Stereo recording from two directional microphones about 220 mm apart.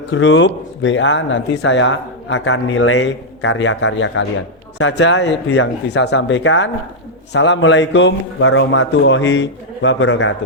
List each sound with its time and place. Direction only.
0.1 s speech: 60° left (ahead or behind)